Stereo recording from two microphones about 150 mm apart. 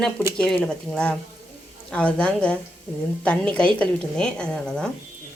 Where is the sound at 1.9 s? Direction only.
10° left (ahead or behind).